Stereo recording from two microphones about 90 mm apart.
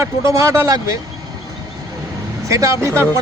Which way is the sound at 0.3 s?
35° right (ahead or behind).